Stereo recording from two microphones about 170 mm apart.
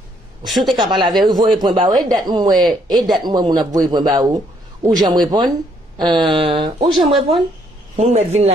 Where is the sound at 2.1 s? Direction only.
25° right (ahead or behind).